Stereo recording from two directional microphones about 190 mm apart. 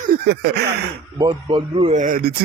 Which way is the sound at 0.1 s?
60° right (ahead or behind).